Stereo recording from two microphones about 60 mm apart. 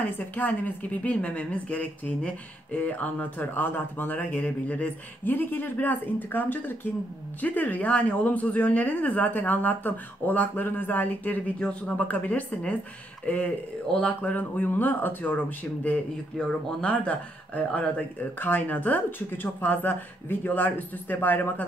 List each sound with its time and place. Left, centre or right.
0.0 s speech: left
16.3 s speech: centre
18.4 s speech: left